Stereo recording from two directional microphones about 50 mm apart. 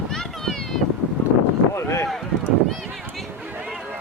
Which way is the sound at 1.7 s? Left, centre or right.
Left.